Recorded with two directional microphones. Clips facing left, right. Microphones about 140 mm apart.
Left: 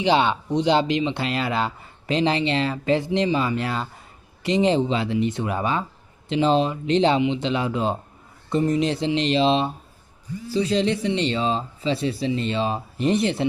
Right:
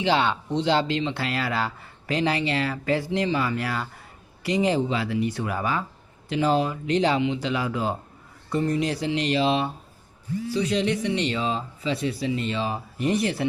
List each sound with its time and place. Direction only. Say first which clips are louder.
0.0 s speech: left 3 dB; 15° left (ahead or behind)